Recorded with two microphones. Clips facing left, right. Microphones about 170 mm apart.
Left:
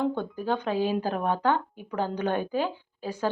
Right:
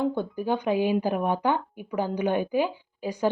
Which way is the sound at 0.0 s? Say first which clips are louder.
Right 1 dB; 10° right (ahead or behind).